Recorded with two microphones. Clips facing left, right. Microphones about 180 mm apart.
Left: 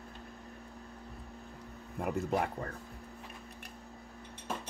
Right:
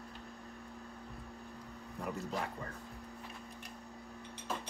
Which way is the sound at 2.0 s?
60° left (ahead or behind).